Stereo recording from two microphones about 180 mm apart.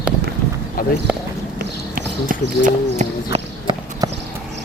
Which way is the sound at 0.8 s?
55° left (ahead or behind).